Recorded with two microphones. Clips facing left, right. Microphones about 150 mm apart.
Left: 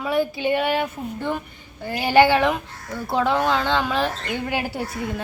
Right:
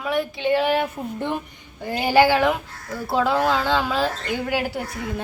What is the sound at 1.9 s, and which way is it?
A woman's voice, 10° right (ahead or behind).